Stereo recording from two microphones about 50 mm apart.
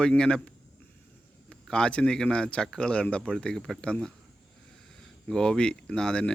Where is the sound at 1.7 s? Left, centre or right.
Centre.